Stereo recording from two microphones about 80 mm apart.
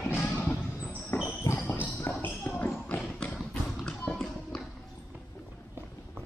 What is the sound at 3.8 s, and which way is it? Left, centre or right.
Tap, centre.